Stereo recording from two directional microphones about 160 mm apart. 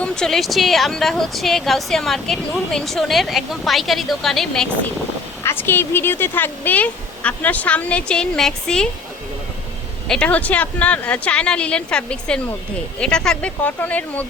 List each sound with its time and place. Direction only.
0.0 s a woman's voice: 5° left (ahead or behind)
5.4 s speech: 15° left (ahead or behind)
10.1 s speech: 5° left (ahead or behind)